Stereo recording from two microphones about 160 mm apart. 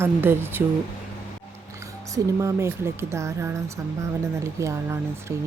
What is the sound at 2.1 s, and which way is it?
Speech, 20° right (ahead or behind).